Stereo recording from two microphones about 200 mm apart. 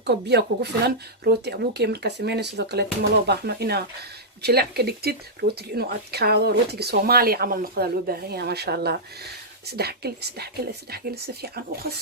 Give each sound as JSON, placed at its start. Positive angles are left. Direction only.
{"t": 0.0, "sound": "speech", "side_deg": -55}